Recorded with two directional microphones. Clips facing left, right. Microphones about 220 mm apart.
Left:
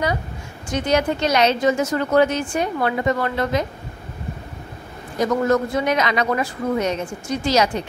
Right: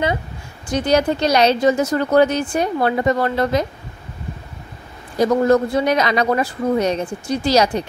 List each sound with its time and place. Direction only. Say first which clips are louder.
0.7 s speech: right 3 dB; 35° right (ahead or behind)
5.2 s speech: right 4 dB; 35° right (ahead or behind)